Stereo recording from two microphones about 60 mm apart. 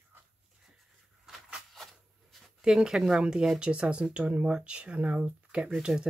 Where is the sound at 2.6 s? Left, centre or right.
Centre.